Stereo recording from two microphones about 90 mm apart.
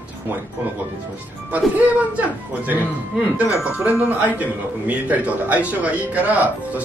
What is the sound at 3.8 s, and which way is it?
Speech, 20° right (ahead or behind).